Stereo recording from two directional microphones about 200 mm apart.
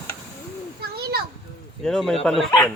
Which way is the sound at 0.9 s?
50° right (ahead or behind).